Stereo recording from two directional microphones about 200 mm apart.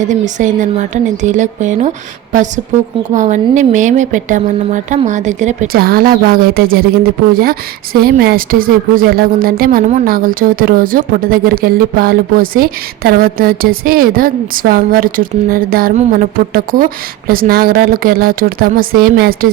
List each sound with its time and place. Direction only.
0.0 s speech: 40° right (ahead or behind)
3.2 s speech: 35° right (ahead or behind)
8.0 s speech: 50° right (ahead or behind)